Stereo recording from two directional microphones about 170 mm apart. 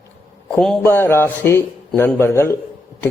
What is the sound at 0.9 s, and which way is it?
A man's voice, 15° left (ahead or behind).